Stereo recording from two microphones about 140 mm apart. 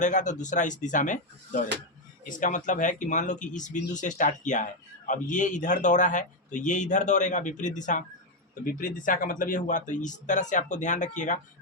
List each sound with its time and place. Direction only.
0.0 s speech: 60° left (ahead or behind)
8.6 s speech: 75° left (ahead or behind)